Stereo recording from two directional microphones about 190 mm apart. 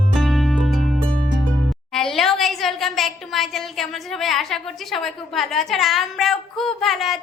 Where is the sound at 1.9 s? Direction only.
Centre (ahead or behind).